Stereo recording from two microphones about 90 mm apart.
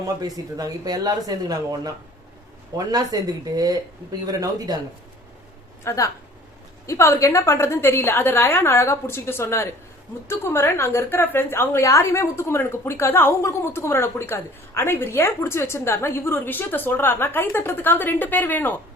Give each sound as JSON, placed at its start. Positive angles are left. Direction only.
{"t": 0.0, "sound": "speech", "side_deg": -45}
{"t": 5.8, "sound": "a woman's voice", "side_deg": 30}